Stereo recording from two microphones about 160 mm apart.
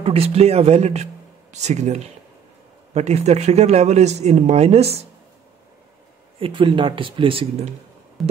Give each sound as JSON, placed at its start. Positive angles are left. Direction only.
{"t": 0.0, "sound": "speech", "side_deg": -40}
{"t": 6.4, "sound": "speech", "side_deg": -35}
{"t": 8.2, "sound": "busy signal", "side_deg": 0}